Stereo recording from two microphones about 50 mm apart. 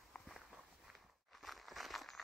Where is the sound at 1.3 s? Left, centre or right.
Centre.